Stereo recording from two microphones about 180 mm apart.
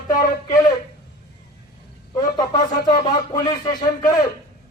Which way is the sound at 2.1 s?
20° left (ahead or behind).